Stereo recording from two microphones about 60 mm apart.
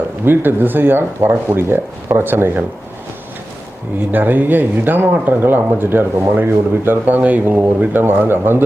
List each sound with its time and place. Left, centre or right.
0.3 s speech: right
4.1 s speech: right
8.0 s speech: right